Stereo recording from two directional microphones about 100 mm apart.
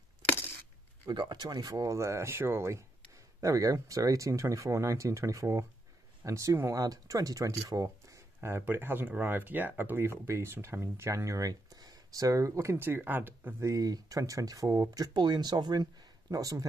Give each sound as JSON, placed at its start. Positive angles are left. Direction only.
{"t": 1.0, "sound": "speech", "side_deg": -50}
{"t": 13.7, "sound": "speech", "side_deg": -35}
{"t": 15.1, "sound": "speech", "side_deg": -50}